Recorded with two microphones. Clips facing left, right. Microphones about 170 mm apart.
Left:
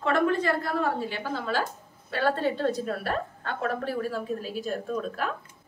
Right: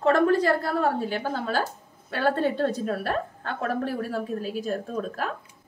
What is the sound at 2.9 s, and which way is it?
A woman's voice, 40° right (ahead or behind).